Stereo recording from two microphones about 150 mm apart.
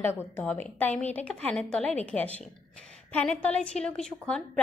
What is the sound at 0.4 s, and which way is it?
A woman's voice, 10° left (ahead or behind).